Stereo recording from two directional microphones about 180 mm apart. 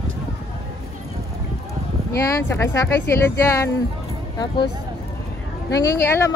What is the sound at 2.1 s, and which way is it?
Speech, 15° left (ahead or behind).